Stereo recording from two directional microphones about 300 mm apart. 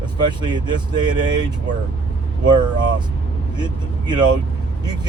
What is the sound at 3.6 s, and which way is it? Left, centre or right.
Speech, centre.